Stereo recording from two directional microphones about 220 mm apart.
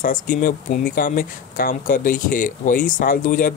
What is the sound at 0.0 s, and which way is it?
Speech, 40° left (ahead or behind).